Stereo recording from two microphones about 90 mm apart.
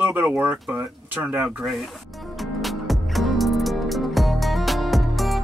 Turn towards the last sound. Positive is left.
turn(degrees=0)  # may be behind; listen again after turning